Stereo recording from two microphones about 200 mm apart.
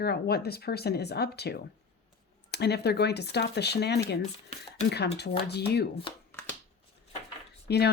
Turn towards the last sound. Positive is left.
turn(degrees=55)  # may be behind; listen again after turning